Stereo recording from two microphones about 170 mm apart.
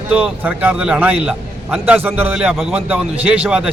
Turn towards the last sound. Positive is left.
turn(degrees=-5)  # may be behind; listen again after turning